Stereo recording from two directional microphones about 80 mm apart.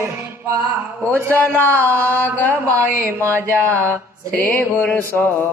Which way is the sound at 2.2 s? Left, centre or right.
Left.